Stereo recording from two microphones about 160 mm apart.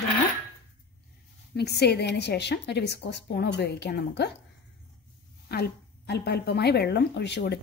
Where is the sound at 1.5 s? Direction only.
90° left.